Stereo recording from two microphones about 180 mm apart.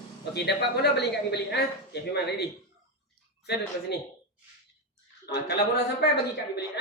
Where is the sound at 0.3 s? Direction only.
70° left (ahead or behind).